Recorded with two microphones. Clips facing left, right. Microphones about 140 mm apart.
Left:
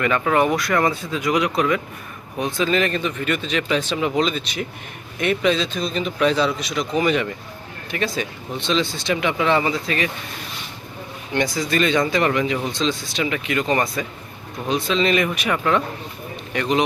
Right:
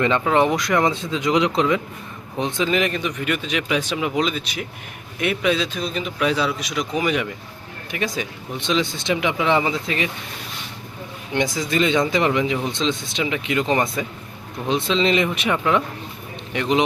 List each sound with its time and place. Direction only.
0.0 s speech: 25° right (ahead or behind)
11.5 s speech: 20° right (ahead or behind)